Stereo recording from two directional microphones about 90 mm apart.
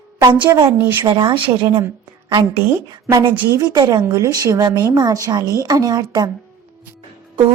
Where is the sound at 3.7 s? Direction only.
50° right (ahead or behind).